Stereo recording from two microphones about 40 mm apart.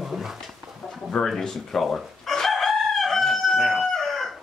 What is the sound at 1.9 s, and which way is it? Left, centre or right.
Chicken, centre.